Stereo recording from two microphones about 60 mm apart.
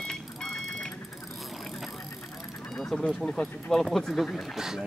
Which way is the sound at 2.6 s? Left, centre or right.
Centre.